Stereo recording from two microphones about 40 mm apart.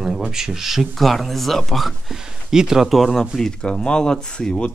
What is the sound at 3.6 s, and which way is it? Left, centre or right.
Speech, left.